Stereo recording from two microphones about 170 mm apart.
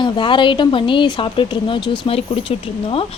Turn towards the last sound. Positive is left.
turn(degrees=30)  # may be behind; listen again after turning